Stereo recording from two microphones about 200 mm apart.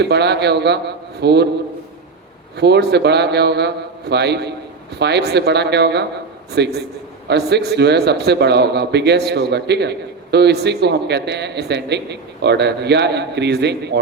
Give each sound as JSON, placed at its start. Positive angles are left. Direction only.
{"t": 0.0, "sound": "a man's voice", "side_deg": -55}
{"t": 2.6, "sound": "a man's voice", "side_deg": -55}